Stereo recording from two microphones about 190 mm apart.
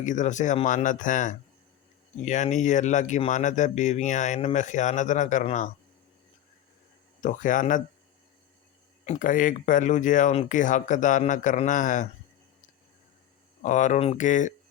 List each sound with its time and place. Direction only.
0.0 s speech: 40° left (ahead or behind)
7.2 s speech: 40° left (ahead or behind)
9.0 s speech: 45° left (ahead or behind)
13.6 s speech: 40° left (ahead or behind)